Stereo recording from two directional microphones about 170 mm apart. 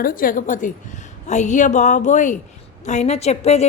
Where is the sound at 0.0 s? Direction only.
55° left (ahead or behind).